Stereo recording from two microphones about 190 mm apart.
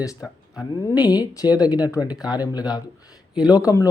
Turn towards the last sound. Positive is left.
turn(degrees=15)  # may be behind; listen again after turning